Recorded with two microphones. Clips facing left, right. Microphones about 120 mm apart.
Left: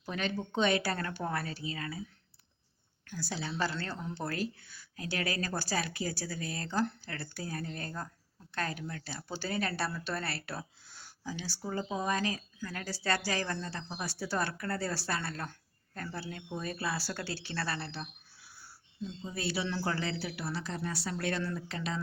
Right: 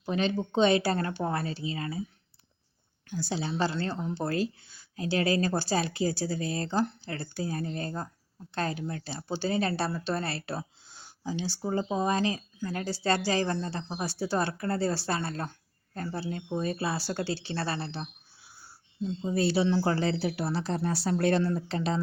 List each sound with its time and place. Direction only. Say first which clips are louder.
0.0 s a woman's voice: right 7 dB; 25° right (ahead or behind)
3.1 s a woman's voice: right 6 dB; 25° right (ahead or behind)